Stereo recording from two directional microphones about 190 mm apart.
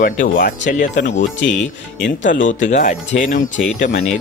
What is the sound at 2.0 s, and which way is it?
Speech, 75° left (ahead or behind).